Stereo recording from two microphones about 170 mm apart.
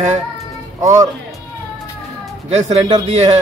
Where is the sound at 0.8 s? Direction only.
20° right (ahead or behind).